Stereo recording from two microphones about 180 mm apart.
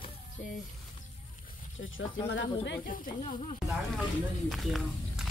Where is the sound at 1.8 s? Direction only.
85° left.